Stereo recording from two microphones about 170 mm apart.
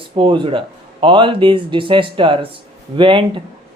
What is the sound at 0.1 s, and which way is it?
Speech, 30° right (ahead or behind).